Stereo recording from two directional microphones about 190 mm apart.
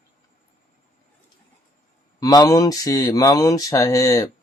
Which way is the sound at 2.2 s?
20° left (ahead or behind).